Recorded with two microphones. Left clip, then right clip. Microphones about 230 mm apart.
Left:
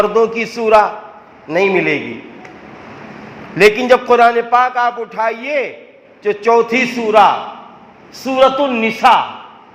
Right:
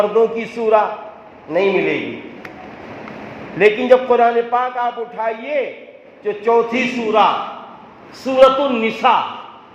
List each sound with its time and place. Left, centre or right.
0.1 s a man's voice: left
3.6 s a man's voice: left